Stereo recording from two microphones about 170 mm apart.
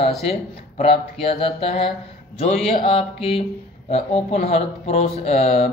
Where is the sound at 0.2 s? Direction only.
35° left (ahead or behind).